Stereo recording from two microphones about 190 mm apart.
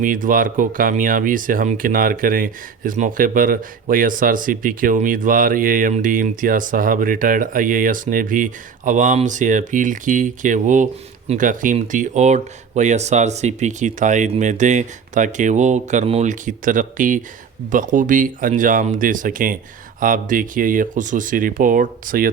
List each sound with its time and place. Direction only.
0.0 s speech: 45° right (ahead or behind)